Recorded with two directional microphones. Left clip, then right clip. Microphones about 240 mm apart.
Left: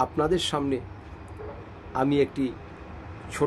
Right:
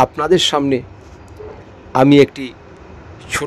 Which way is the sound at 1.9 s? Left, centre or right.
Right.